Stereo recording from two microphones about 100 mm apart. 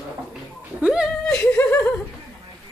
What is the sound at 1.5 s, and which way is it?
Speech, 25° left (ahead or behind).